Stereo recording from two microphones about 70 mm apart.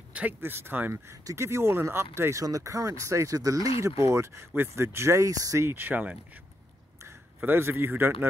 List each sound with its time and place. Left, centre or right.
0.1 s a sound: right
0.4 s speech: right
1.2 s speech: right
2.4 s speech: right
5.7 s speech: right
7.4 s speech: right